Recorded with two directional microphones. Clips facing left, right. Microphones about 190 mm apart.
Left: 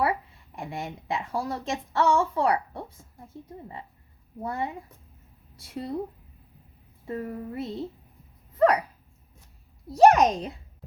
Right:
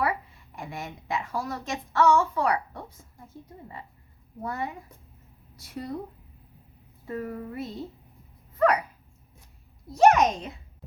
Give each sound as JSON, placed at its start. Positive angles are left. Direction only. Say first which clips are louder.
{"t": 0.5, "sound": "a woman's voice", "louder": "left 3 dB", "side_deg": 30}
{"t": 4.4, "sound": "a woman's voice", "louder": "left 2 dB", "side_deg": 30}
{"t": 7.1, "sound": "a woman's voice", "louder": "left 1 dB", "side_deg": 25}
{"t": 8.5, "sound": "dog", "louder": "left 2 dB", "side_deg": 30}
{"t": 9.9, "sound": "a child's voice", "louder": "left 2 dB", "side_deg": 35}